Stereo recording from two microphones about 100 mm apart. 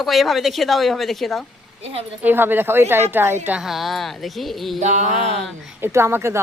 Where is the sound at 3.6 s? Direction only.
Centre (ahead or behind).